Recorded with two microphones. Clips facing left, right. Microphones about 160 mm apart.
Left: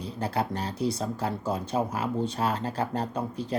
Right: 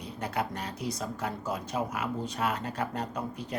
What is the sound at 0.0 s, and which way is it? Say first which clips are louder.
Speech: left 4 dB; 30° left (ahead or behind).